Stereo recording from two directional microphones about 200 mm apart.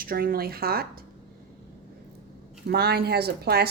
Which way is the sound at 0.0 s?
45° right (ahead or behind).